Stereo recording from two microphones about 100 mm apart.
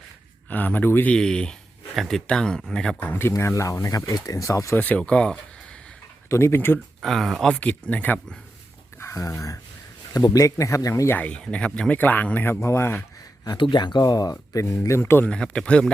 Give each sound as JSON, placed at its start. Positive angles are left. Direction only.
{"t": 0.5, "sound": "speech", "side_deg": 15}
{"t": 1.1, "sound": "speech", "side_deg": 10}
{"t": 3.1, "sound": "speech", "side_deg": 25}
{"t": 4.8, "sound": "speech", "side_deg": 15}
{"t": 6.2, "sound": "speech", "side_deg": 25}
{"t": 7.0, "sound": "speech", "side_deg": 0}
{"t": 7.5, "sound": "speech", "side_deg": 15}
{"t": 9.0, "sound": "speech", "side_deg": 30}
{"t": 11.1, "sound": "speech", "side_deg": 15}
{"t": 12.5, "sound": "speech", "side_deg": 30}
{"t": 13.6, "sound": "speech", "side_deg": 50}
{"t": 14.7, "sound": "speech", "side_deg": 25}
{"t": 15.3, "sound": "speech", "side_deg": 10}